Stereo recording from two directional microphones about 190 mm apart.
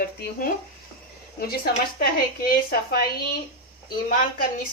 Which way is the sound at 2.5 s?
55° left (ahead or behind).